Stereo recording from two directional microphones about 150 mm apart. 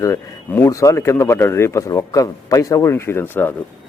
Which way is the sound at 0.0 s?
20° left (ahead or behind).